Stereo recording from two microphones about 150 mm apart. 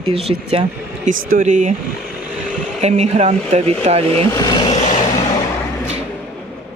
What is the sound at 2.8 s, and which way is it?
Speech, 50° right (ahead or behind).